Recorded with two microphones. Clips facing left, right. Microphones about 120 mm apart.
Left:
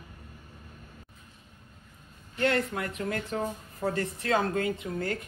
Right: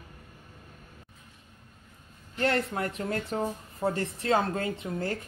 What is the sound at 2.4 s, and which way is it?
A woman's voice, 30° right (ahead or behind).